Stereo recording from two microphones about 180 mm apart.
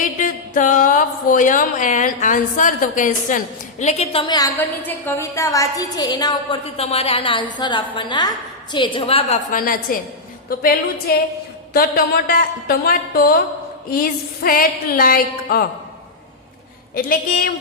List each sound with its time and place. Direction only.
0.0 s speech: 45° left (ahead or behind); by 4.4 s 30° left (ahead or behind)
4.4 s a woman's voice: 15° left (ahead or behind)
6.7 s a woman's voice: 35° left (ahead or behind)
9.5 s speech: 50° left (ahead or behind)
10.5 s a sound: 55° left (ahead or behind)
16.9 s speech: 50° left (ahead or behind)